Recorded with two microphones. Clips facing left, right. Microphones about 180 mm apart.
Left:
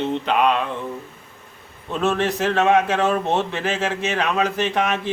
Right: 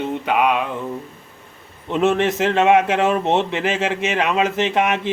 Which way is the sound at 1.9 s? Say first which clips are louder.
Right 4 dB; 20° right (ahead or behind).